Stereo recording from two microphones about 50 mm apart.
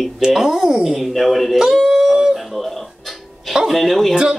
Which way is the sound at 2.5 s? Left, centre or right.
Centre.